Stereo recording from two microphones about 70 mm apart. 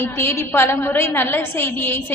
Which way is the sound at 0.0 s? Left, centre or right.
Left.